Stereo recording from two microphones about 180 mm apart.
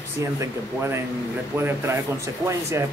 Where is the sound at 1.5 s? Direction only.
15° right (ahead or behind).